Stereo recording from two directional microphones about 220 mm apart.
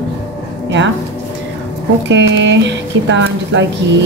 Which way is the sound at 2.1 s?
55° right (ahead or behind).